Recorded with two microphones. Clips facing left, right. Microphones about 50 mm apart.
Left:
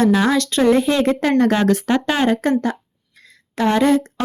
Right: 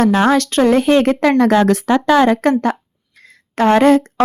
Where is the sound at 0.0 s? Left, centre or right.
Right.